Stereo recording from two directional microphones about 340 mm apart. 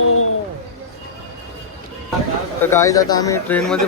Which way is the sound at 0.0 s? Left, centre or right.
Left.